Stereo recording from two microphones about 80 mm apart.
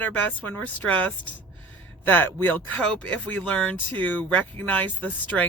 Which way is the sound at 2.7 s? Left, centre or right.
Centre.